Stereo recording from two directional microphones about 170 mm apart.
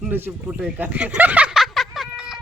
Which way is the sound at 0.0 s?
10° right (ahead or behind).